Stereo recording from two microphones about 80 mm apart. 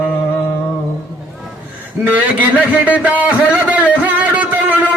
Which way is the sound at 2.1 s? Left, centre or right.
Centre.